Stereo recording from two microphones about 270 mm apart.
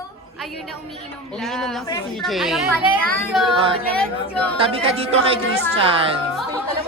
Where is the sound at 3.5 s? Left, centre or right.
Centre.